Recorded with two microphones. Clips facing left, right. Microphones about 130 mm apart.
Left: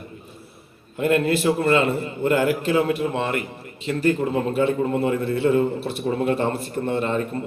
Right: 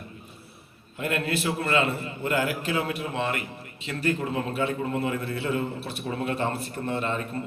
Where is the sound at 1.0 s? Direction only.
30° left (ahead or behind).